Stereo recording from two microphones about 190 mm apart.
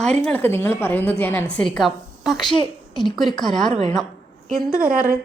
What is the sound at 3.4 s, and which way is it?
A woman's voice, centre (ahead or behind).